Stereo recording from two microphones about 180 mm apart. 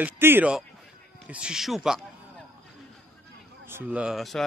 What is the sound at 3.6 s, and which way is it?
Speech, 10° right (ahead or behind).